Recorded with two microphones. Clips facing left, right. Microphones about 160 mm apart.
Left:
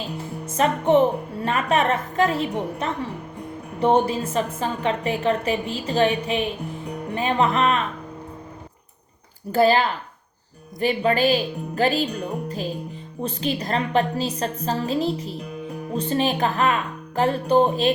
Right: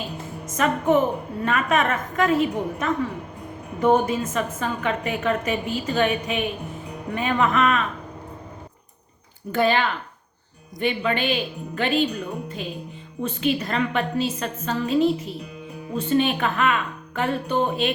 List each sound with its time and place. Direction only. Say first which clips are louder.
0.4 s a woman's voice: left 1 dB; 30° left (ahead or behind)
9.5 s a woman's voice: left 3 dB; 35° left (ahead or behind)